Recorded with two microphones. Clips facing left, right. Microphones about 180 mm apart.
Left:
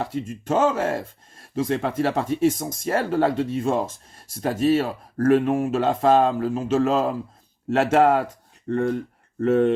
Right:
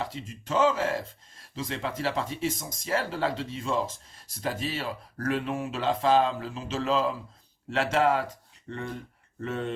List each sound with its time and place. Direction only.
0.0 s speech: 50° left (ahead or behind)